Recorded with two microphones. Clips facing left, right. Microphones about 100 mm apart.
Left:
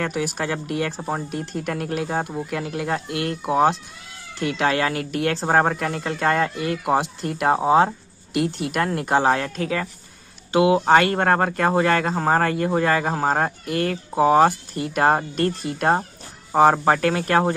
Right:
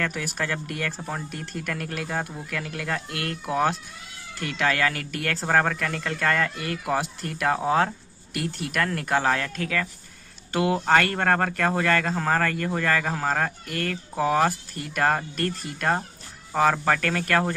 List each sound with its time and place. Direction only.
0.0 s speech: 25° left (ahead or behind)
10.5 s speech: 10° left (ahead or behind)